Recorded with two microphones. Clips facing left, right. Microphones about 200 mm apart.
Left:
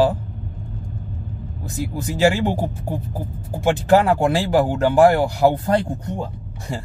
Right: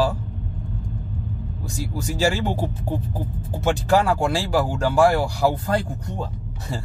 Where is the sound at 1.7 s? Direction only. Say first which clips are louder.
Left 3 dB; 15° left (ahead or behind).